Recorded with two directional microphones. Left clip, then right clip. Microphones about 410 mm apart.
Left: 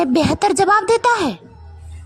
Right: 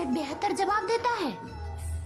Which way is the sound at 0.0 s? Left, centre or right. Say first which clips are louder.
Left 14 dB; centre.